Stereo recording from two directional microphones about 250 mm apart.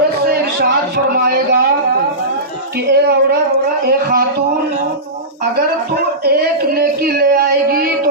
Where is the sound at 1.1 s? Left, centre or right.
Right.